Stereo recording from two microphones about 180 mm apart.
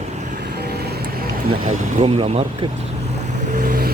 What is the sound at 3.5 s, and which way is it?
Vehicle, 50° right (ahead or behind).